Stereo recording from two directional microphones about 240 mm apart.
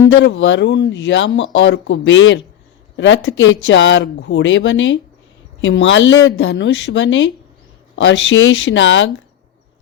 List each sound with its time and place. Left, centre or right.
0.0 s speech: left